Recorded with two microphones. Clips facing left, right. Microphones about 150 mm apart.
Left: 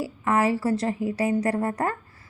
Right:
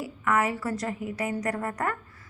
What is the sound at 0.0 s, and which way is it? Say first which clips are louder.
A woman's voice: left 3 dB; 30° left (ahead or behind).